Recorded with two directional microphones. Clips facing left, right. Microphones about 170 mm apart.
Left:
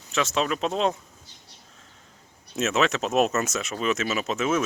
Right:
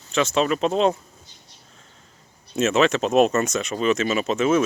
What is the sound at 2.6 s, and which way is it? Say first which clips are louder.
Speech: right 5 dB; centre (ahead or behind).